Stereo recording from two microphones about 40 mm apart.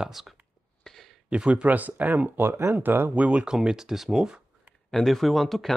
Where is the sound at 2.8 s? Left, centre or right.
Right.